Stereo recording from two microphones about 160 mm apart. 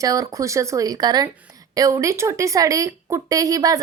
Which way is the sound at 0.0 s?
20° right (ahead or behind).